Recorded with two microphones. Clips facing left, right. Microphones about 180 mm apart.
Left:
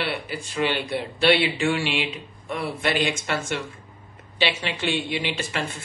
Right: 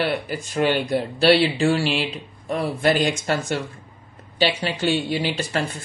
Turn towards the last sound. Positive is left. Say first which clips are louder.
# right 4 dB
turn(degrees=-35)  # may be behind; listen again after turning